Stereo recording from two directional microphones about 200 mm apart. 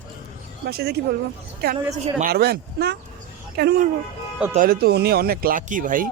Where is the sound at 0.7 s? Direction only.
50° right (ahead or behind).